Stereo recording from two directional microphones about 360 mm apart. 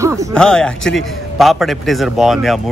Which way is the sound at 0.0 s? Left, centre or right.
Centre.